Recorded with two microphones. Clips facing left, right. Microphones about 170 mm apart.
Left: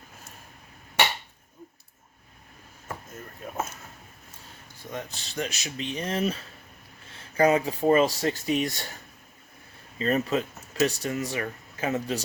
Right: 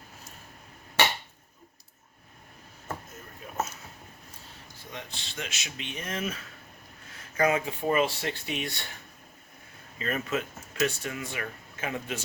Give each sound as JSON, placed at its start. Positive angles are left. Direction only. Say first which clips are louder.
{"t": 4.9, "sound": "speech", "louder": "left 6 dB", "side_deg": 40}
{"t": 10.0, "sound": "speech", "louder": "left 6 dB", "side_deg": 35}